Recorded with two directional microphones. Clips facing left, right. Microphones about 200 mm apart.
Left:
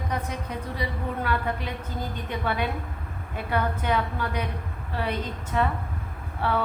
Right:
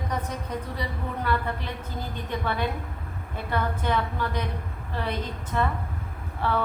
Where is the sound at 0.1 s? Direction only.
10° left (ahead or behind).